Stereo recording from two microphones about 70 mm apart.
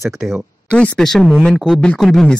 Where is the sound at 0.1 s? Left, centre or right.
Centre.